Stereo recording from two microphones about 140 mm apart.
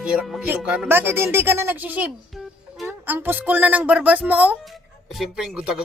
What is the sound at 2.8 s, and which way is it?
Speech, 15° right (ahead or behind).